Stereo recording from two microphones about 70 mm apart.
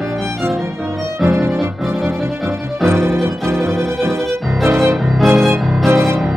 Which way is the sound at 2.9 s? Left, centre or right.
Right.